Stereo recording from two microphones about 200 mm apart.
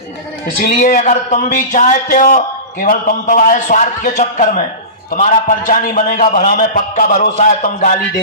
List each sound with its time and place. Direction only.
0.6 s speech: 45° left (ahead or behind)